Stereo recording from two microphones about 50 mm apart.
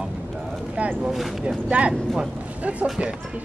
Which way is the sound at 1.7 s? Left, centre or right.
Right.